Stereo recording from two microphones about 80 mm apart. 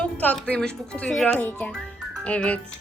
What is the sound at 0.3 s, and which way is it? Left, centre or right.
Speech, centre.